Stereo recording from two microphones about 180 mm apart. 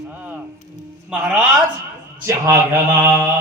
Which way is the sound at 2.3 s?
15° right (ahead or behind).